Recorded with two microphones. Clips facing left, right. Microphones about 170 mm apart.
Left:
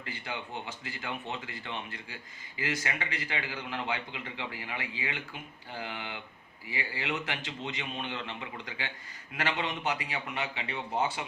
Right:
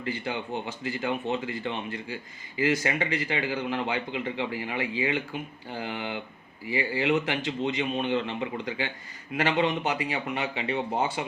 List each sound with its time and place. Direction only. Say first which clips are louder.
0.0 s a man's voice: right 8 dB; 25° right (ahead or behind)